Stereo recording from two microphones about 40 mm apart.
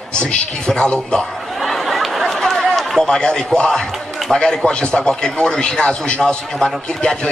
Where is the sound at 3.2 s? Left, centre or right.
Left.